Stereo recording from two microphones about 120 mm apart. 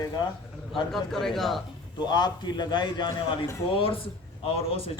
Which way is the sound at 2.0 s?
35° left (ahead or behind).